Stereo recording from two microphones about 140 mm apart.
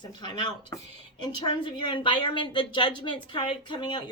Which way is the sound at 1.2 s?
30° left (ahead or behind).